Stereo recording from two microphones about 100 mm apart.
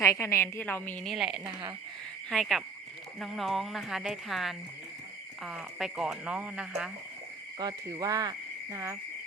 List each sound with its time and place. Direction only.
0.0 s a woman's voice: 30° left (ahead or behind)
1.0 s speech: 5° right (ahead or behind)
7.6 s speech: 40° right (ahead or behind)
8.7 s speech: 30° right (ahead or behind)